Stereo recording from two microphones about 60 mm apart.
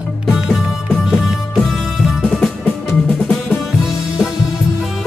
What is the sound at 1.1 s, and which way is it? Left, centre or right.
Music, centre.